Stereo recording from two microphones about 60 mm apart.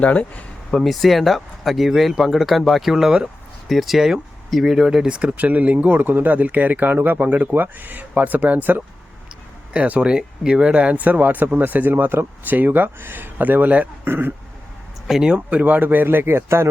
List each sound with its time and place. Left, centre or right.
0.0 s speech: left
0.7 s speech: centre; by 13.8 s right
14.0 s speech: right
15.0 s speech: centre
15.4 s speech: right